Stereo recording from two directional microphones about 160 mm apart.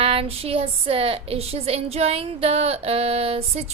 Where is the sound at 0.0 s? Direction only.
35° right (ahead or behind).